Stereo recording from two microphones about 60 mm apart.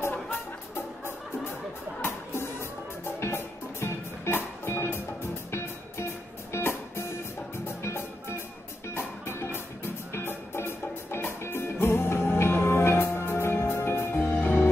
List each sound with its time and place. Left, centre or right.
0.0 s music: left
2.0 s music: left